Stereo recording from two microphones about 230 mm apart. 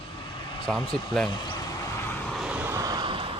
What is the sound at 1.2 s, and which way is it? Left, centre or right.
Vehicle, centre.